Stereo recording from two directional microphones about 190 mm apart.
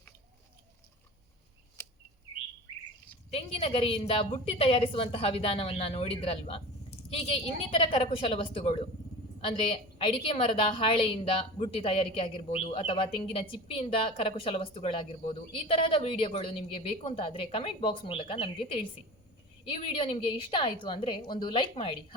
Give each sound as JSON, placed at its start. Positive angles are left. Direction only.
{"t": 3.2, "sound": "a woman's voice", "side_deg": 30}
{"t": 7.7, "sound": "a woman's voice", "side_deg": 30}